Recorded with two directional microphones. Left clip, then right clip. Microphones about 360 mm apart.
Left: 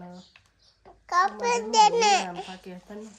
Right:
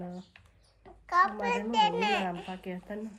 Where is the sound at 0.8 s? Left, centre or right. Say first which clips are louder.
Left 2 dB; centre.